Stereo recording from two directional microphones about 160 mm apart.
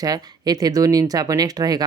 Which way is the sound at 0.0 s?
25° right (ahead or behind).